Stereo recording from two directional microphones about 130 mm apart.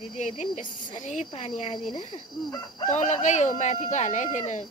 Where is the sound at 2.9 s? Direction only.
65° left (ahead or behind).